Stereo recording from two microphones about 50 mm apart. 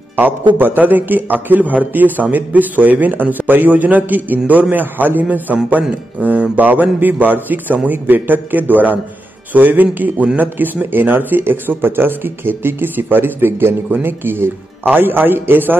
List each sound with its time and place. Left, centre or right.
0.1 s a man's voice: right